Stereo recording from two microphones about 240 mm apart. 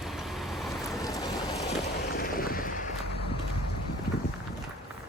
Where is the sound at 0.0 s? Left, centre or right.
Centre.